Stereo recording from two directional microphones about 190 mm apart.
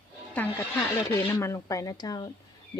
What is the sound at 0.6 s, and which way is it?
Speech, 10° left (ahead or behind).